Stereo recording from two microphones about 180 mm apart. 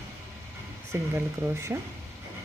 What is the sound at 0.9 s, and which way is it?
Speech, 15° right (ahead or behind).